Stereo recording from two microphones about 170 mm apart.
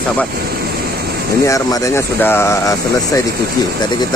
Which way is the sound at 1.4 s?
20° left (ahead or behind).